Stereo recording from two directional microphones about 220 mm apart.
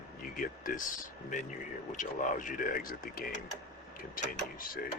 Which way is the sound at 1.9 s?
35° left (ahead or behind).